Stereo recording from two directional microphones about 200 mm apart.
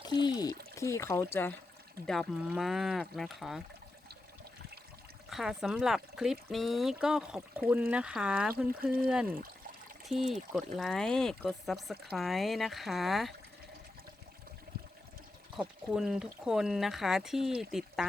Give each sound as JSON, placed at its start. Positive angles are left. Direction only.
{"t": 0.0, "sound": "speech", "side_deg": 20}
{"t": 2.0, "sound": "speech", "side_deg": 0}
{"t": 5.3, "sound": "speech", "side_deg": 0}
{"t": 15.5, "sound": "speech", "side_deg": 0}